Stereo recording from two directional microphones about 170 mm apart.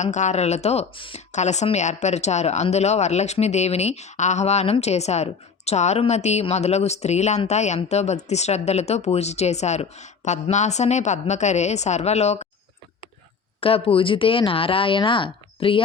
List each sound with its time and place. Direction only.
0.0 s speech: 45° left (ahead or behind)
1.3 s speech: 45° left (ahead or behind)
13.6 s speech: 35° left (ahead or behind)